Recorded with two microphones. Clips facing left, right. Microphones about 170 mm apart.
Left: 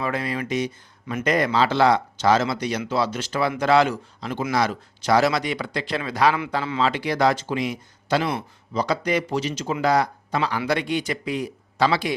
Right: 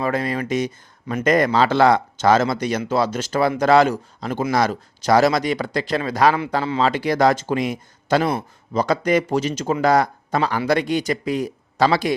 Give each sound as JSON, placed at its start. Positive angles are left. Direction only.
{"t": 0.0, "sound": "speech", "side_deg": -40}